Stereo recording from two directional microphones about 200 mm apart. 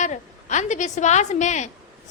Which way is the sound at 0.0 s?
35° left (ahead or behind).